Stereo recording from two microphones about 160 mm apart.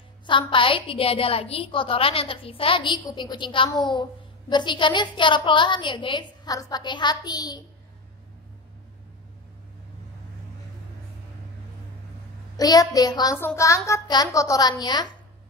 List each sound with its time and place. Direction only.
0.3 s a woman's voice: 30° left (ahead or behind)
12.5 s a child's voice: 25° left (ahead or behind)